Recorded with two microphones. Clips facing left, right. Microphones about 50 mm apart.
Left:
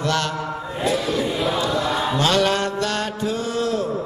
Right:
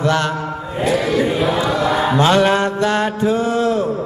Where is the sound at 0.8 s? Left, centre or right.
Right.